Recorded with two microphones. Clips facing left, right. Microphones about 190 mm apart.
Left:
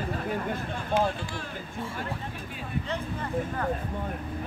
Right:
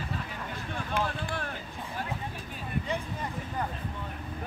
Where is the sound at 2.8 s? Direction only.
15° right (ahead or behind).